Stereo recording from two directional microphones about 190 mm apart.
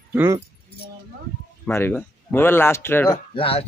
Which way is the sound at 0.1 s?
10° right (ahead or behind).